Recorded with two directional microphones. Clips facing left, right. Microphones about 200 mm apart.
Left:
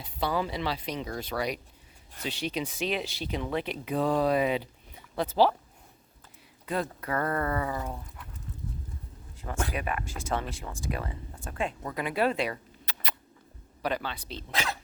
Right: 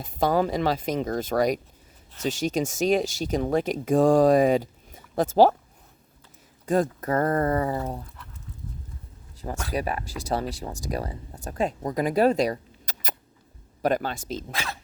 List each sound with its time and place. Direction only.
0.0 s speech: 45° right (ahead or behind)
6.7 s speech: 45° right (ahead or behind)
9.7 s speech: 35° right (ahead or behind)